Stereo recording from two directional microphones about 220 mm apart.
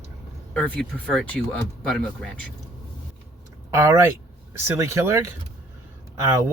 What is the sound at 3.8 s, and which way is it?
Speech, 10° right (ahead or behind).